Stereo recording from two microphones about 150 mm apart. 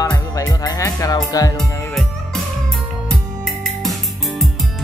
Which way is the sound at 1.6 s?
Centre (ahead or behind).